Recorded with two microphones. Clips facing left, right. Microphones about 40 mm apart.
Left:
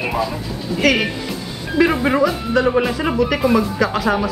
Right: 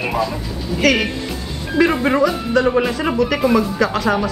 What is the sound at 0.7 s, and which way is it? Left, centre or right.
Speech, centre.